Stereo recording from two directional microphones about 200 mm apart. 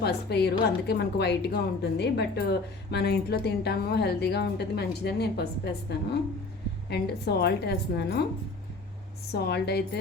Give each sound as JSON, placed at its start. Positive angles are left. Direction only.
{"t": 0.0, "sound": "a woman's voice", "side_deg": 55}
{"t": 9.3, "sound": "a woman's voice", "side_deg": 55}